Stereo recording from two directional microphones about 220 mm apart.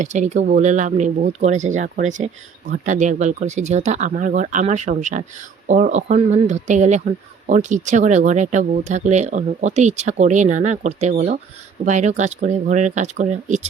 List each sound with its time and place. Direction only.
0.0 s speech: 35° right (ahead or behind)